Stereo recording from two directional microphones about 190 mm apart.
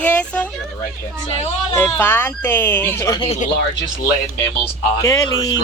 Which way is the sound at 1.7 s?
10° left (ahead or behind).